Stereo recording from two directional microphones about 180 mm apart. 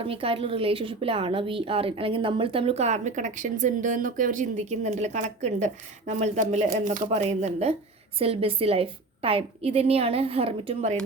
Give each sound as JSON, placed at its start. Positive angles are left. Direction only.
{"t": 0.0, "sound": "a woman's voice", "side_deg": -30}